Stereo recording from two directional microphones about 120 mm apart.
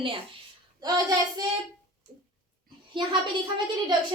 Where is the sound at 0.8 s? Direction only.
30° right (ahead or behind).